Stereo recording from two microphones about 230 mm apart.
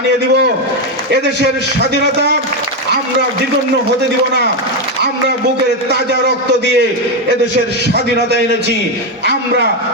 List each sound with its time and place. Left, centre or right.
1.1 s a man's voice: right
5.9 s a man's voice: right